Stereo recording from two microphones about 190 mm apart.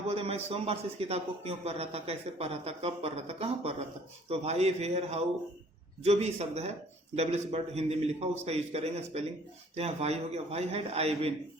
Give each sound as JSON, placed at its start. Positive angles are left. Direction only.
{"t": 0.1, "sound": "a man's voice", "side_deg": -30}